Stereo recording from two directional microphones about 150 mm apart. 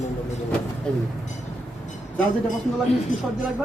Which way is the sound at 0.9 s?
5° left (ahead or behind).